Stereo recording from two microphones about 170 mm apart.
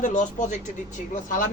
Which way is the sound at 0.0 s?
50° left (ahead or behind).